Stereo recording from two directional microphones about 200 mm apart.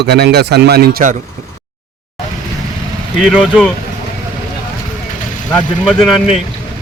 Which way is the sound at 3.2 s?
Centre (ahead or behind).